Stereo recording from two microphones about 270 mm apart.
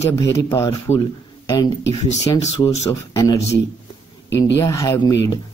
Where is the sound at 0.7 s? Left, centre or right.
Left.